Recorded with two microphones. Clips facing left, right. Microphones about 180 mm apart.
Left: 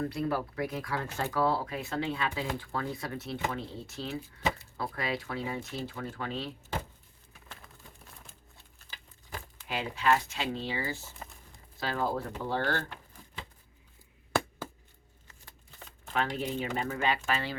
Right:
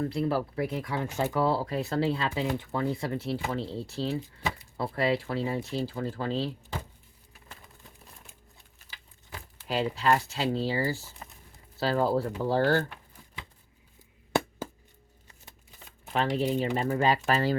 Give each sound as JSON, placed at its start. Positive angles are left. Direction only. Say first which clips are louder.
{"t": 0.0, "sound": "speech", "louder": "right 3 dB", "side_deg": -25}
{"t": 9.6, "sound": "speech", "louder": "right 3 dB", "side_deg": -35}
{"t": 16.1, "sound": "speech", "louder": "right 5 dB", "side_deg": -35}